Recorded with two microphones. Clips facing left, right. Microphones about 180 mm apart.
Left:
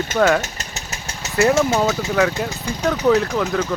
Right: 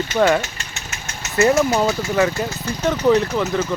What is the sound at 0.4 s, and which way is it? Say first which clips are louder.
Engine: left 2 dB; 40° left (ahead or behind).